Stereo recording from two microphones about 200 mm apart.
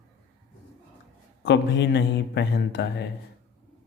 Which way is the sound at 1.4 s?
60° left (ahead or behind).